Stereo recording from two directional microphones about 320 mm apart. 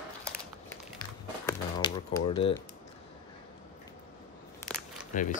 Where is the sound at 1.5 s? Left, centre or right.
Centre.